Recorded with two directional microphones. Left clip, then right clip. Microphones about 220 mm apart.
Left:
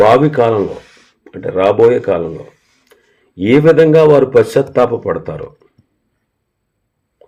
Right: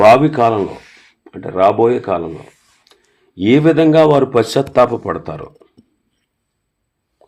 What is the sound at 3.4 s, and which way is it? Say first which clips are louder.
Speech: left 3 dB; 30° right (ahead or behind).